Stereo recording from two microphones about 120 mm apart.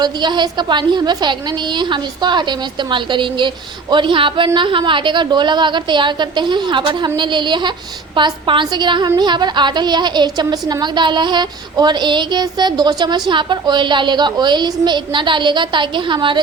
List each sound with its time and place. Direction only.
0.0 s a woman's voice: 40° right (ahead or behind)